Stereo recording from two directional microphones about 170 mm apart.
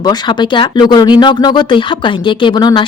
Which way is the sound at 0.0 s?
25° left (ahead or behind).